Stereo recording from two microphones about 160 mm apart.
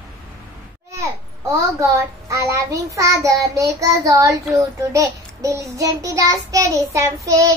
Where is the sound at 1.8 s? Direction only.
20° right (ahead or behind).